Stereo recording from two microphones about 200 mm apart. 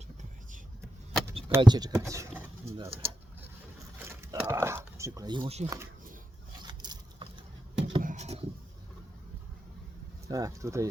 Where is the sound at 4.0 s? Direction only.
15° right (ahead or behind).